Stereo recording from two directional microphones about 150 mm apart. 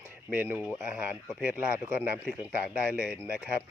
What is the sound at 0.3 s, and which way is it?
Speech, 10° right (ahead or behind).